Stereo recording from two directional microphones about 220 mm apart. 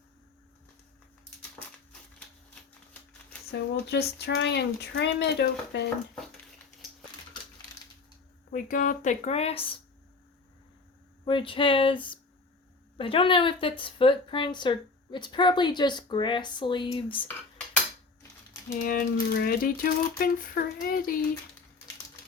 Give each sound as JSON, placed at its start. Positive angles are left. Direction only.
{"t": 1.4, "sound": "a sound", "side_deg": 5}
{"t": 3.5, "sound": "speech", "side_deg": 50}
{"t": 8.4, "sound": "speech", "side_deg": 40}
{"t": 11.3, "sound": "speech", "side_deg": 25}
{"t": 18.8, "sound": "speech", "side_deg": 40}